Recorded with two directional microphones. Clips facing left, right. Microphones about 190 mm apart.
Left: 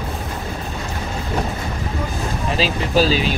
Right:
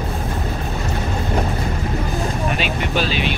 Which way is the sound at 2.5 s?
35° left (ahead or behind).